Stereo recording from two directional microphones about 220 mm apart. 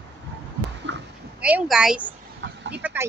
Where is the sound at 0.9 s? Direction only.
55° right (ahead or behind).